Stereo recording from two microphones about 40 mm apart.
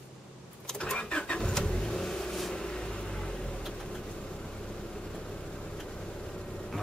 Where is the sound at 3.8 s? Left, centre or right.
Centre.